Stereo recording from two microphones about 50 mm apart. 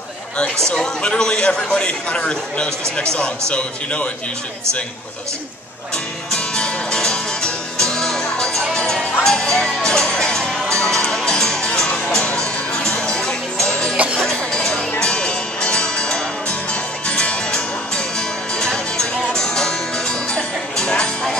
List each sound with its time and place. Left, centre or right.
0.7 s a man's voice: centre
6.3 s music: centre
13.9 s music: right
14.3 s music: centre